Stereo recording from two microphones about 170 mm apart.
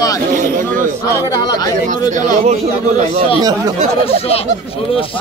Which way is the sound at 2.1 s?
45° right (ahead or behind).